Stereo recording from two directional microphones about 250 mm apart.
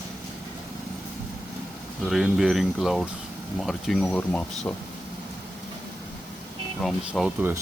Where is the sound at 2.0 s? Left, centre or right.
Centre.